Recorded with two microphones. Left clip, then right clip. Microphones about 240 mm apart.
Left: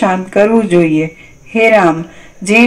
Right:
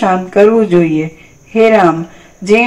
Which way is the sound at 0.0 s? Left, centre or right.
Left.